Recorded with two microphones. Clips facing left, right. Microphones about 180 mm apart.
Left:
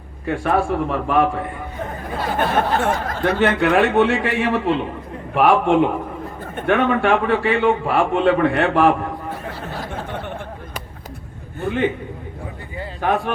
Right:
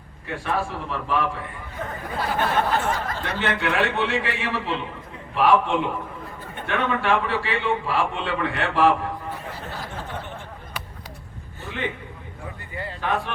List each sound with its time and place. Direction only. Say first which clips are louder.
0.3 s a man's voice: left 8 dB; 55° left (ahead or behind)
2.6 s a man's voice: left 4 dB; 50° left (ahead or behind)
11.6 s a man's voice: left 10 dB; 50° left (ahead or behind)
13.0 s a man's voice: left 6 dB; 50° left (ahead or behind)